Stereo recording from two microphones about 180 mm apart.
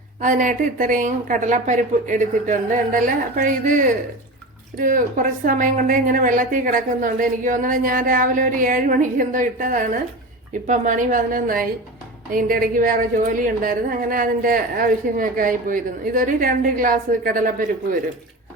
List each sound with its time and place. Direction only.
0.2 s a woman's voice: 45° right (ahead or behind)